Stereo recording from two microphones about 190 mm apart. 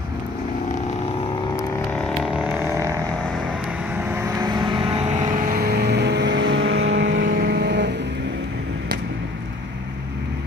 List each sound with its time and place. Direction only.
2.3 s vehicle: 10° right (ahead or behind)
4.1 s vehicle: 15° right (ahead or behind)
5.5 s vehicle: 55° right (ahead or behind); by 7.2 s 80° right
7.2 s vehicle: 55° right (ahead or behind)